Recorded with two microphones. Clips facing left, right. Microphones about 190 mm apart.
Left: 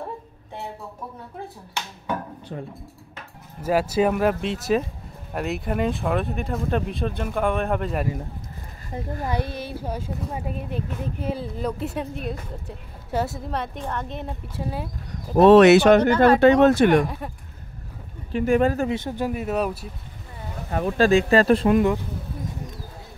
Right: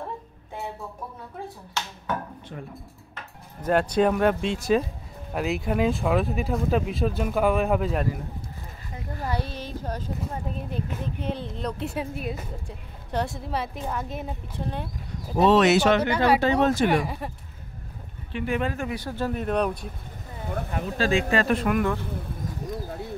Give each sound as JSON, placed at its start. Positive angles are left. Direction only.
{"t": 3.6, "sound": "speech", "side_deg": 5}
{"t": 9.2, "sound": "speech", "side_deg": 15}
{"t": 15.4, "sound": "speech", "side_deg": 55}
{"t": 16.9, "sound": "speech", "side_deg": -5}
{"t": 18.3, "sound": "speech", "side_deg": 45}
{"t": 18.9, "sound": "speech", "side_deg": 20}
{"t": 20.7, "sound": "speech", "side_deg": 50}